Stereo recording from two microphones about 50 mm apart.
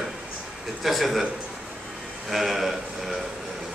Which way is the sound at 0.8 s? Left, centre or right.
Centre.